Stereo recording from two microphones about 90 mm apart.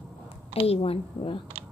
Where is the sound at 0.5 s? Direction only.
90° left.